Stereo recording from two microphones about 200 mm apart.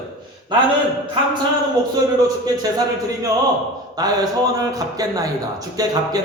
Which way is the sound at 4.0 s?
20° right (ahead or behind).